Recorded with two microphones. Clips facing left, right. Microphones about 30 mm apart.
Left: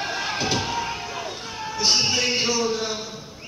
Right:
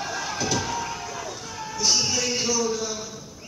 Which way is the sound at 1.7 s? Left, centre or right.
Left.